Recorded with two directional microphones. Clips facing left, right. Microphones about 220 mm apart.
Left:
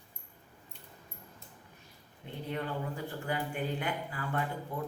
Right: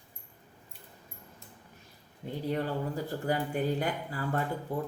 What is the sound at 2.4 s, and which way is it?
Speech, 40° right (ahead or behind).